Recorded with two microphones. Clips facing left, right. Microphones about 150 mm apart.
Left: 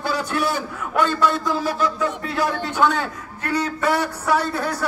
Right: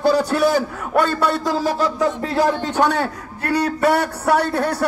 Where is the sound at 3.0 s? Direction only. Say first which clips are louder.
Right 4 dB; 65° right (ahead or behind).